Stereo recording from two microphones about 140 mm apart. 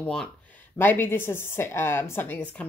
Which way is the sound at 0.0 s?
10° left (ahead or behind).